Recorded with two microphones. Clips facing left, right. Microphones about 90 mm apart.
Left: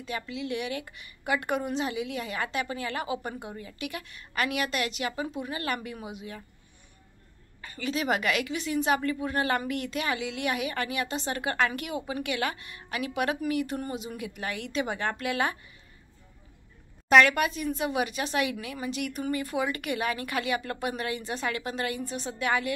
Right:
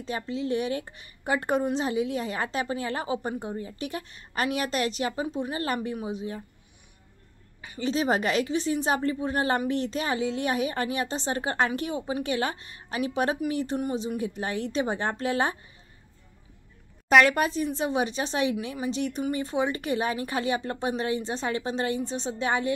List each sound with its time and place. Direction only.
0.0 s a woman's voice: 35° right (ahead or behind)
7.8 s a woman's voice: 30° right (ahead or behind)
17.2 s speech: 35° right (ahead or behind)